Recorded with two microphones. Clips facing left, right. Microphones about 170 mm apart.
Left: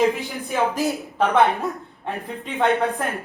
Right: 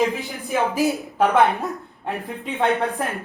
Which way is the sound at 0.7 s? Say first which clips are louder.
Right 2 dB; 15° right (ahead or behind).